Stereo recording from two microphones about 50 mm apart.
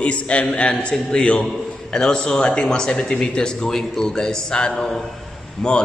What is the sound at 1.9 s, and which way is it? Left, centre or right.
Speech, centre.